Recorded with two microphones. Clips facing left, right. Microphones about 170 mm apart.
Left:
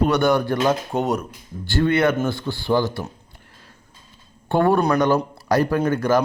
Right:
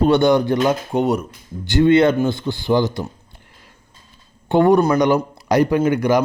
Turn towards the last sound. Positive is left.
turn(degrees=-15)  # may be behind; listen again after turning